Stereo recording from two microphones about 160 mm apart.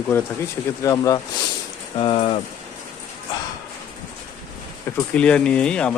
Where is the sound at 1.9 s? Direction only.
35° left (ahead or behind).